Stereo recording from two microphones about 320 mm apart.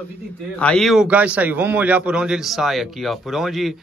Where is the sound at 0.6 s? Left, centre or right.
Centre.